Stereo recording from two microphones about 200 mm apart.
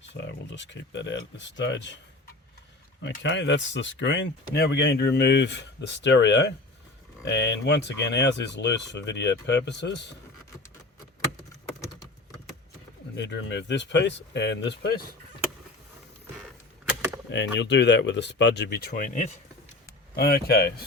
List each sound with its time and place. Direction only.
0.1 s speech: 65° left (ahead or behind)
3.0 s speech: 65° left (ahead or behind)
13.1 s speech: 60° left (ahead or behind)
17.2 s speech: 60° left (ahead or behind)